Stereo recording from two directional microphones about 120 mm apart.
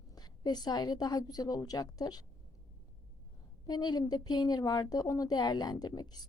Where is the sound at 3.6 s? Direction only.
35° left (ahead or behind).